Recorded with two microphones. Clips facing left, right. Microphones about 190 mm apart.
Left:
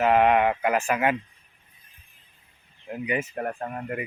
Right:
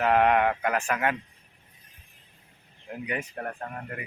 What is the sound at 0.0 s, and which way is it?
Speech, 5° left (ahead or behind).